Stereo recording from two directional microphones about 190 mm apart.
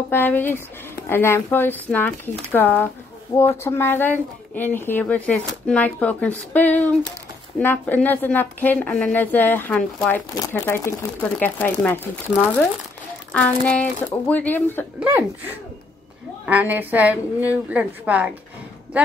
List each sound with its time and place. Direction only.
0.1 s a woman's voice: 10° left (ahead or behind)
15.0 s a woman's voice: 10° right (ahead or behind)